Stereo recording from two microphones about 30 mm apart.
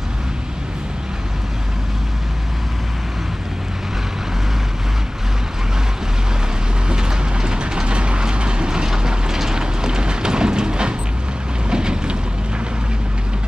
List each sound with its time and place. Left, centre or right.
6.9 s vehicle: right
11.7 s boat: right